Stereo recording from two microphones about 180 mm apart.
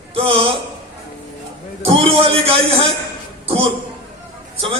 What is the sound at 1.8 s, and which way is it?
Speech, 30° right (ahead or behind).